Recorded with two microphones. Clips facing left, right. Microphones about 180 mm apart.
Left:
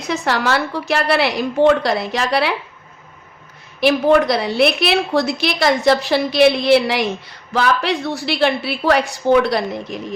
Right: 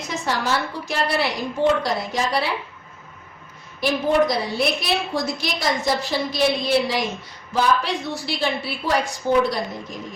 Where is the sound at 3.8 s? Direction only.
70° left (ahead or behind).